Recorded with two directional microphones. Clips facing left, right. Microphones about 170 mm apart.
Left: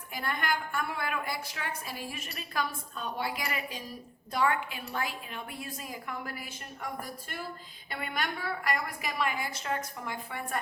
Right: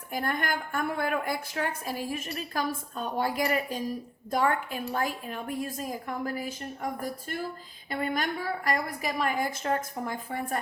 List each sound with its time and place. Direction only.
0.1 s a woman's voice: 45° right (ahead or behind)